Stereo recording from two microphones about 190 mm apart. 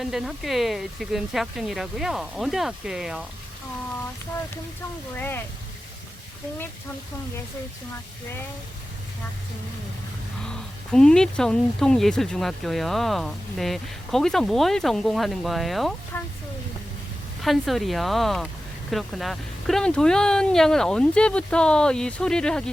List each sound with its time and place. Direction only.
0.0 s speech: centre (ahead or behind)
5.1 s speech: 10° left (ahead or behind)
10.4 s speech: 5° left (ahead or behind)
17.4 s speech: centre (ahead or behind)